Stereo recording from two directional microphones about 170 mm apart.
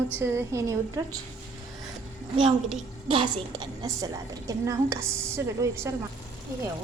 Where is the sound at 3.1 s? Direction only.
30° right (ahead or behind).